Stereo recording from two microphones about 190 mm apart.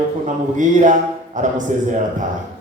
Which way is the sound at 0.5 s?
40° right (ahead or behind).